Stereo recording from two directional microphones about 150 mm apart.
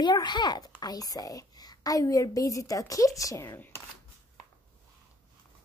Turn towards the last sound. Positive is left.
turn(degrees=15)  # may be behind; listen again after turning